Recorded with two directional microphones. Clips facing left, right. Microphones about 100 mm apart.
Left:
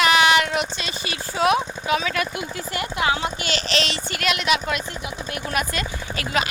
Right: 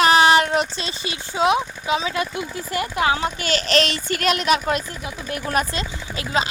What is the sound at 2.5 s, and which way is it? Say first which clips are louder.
A woman's voice: right 4 dB; 35° right (ahead or behind).